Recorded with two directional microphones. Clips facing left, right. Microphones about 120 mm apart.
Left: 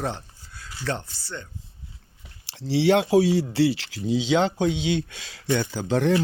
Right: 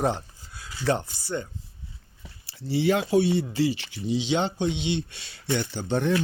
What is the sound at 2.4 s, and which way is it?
Speech, 90° left.